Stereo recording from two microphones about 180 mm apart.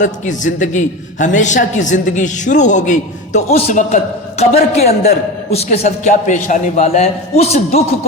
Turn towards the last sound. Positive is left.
turn(degrees=35)  # may be behind; listen again after turning